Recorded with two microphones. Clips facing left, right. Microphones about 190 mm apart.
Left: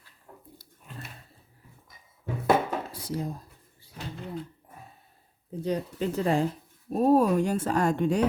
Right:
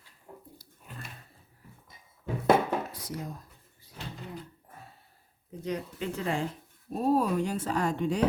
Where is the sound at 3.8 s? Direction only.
30° left (ahead or behind).